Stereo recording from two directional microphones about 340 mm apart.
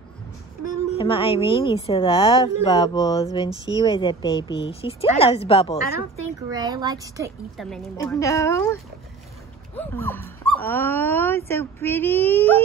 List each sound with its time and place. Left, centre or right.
0.7 s a woman's voice: centre
6.5 s speech: centre
7.5 s a woman's voice: centre
9.8 s speech: centre